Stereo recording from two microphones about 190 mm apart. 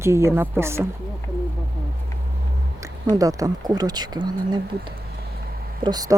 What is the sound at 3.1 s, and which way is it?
Speech, 20° right (ahead or behind).